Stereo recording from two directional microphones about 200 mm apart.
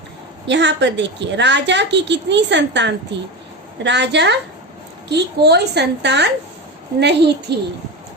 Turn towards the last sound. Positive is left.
turn(degrees=-55)  # may be behind; listen again after turning